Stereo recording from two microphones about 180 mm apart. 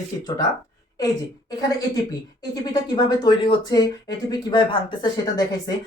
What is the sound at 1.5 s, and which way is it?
A woman's voice, 20° left (ahead or behind).